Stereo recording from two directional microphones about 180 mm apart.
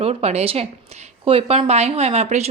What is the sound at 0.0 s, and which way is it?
A woman's voice, 35° right (ahead or behind).